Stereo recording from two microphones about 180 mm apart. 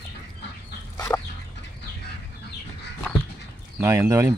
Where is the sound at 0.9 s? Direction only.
20° left (ahead or behind).